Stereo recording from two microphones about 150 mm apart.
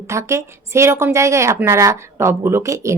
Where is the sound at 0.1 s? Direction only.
20° right (ahead or behind).